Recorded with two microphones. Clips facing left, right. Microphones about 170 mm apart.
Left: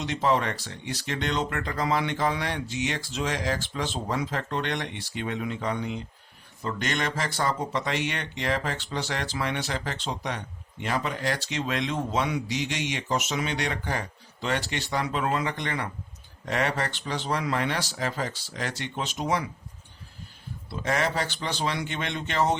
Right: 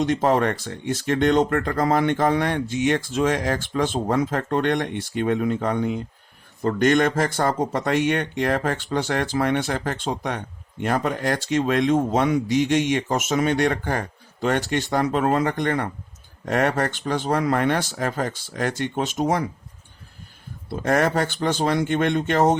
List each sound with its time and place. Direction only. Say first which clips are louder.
0.0 s speech: right 6 dB; 45° right (ahead or behind)
20.7 s speech: right 7 dB; 50° right (ahead or behind)